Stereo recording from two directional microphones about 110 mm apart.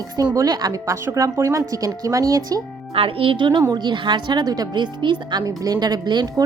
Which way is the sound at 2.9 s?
55° right (ahead or behind).